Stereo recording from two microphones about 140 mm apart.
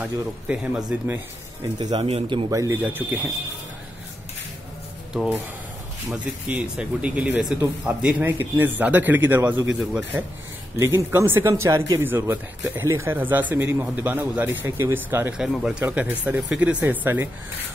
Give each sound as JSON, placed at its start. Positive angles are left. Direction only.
{"t": 0.0, "sound": "speech", "side_deg": -5}
{"t": 1.8, "sound": "speech", "side_deg": -30}
{"t": 2.5, "sound": "speech", "side_deg": -20}
{"t": 6.0, "sound": "speech", "side_deg": -10}
{"t": 15.3, "sound": "speech", "side_deg": -5}